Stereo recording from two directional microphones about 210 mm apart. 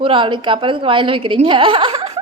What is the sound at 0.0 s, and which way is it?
A woman's voice, 25° right (ahead or behind).